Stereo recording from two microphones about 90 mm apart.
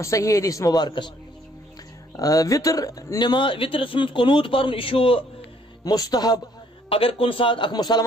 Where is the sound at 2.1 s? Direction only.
40° left (ahead or behind); by 5.2 s 90° left.